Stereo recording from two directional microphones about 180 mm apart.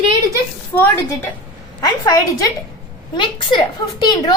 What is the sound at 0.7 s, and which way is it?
A woman's voice, 10° left (ahead or behind).